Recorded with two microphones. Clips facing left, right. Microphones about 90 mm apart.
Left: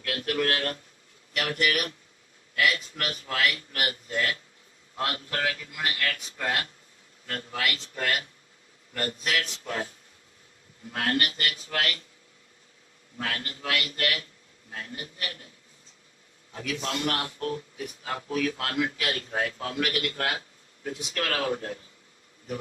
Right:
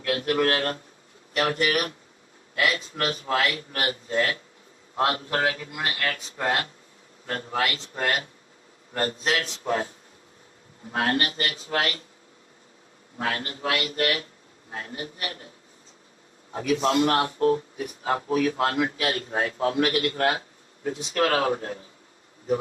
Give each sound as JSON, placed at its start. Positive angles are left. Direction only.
{"t": 0.0, "sound": "a man's voice", "side_deg": -35}
{"t": 10.9, "sound": "a man's voice", "side_deg": -30}
{"t": 13.1, "sound": "a man's voice", "side_deg": -30}
{"t": 16.5, "sound": "a man's voice", "side_deg": -35}